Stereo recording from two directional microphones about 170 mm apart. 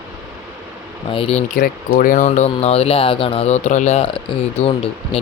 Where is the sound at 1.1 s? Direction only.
35° left (ahead or behind).